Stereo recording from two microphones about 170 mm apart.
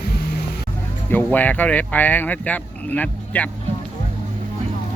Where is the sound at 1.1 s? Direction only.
10° left (ahead or behind).